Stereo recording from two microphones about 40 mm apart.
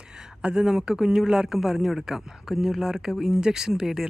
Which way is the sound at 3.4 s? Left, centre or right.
Centre.